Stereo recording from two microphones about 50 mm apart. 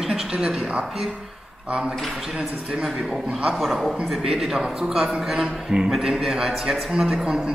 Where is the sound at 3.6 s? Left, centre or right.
Centre.